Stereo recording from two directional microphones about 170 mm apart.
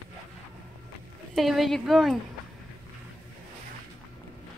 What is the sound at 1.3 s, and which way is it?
Speech, centre (ahead or behind).